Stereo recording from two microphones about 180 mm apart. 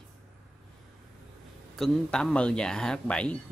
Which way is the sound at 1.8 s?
Centre (ahead or behind).